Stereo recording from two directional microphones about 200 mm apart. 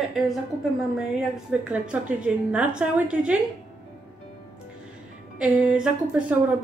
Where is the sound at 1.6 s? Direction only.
5° right (ahead or behind).